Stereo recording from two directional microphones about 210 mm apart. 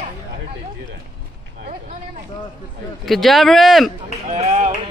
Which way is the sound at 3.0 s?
Centre (ahead or behind).